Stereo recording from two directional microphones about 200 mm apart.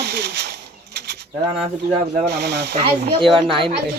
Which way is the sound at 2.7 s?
30° right (ahead or behind).